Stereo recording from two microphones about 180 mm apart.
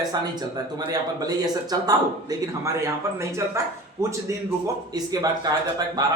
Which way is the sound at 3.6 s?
15° right (ahead or behind).